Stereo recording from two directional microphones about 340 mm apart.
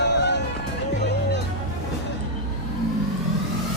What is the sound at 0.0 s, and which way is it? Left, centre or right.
Run, left.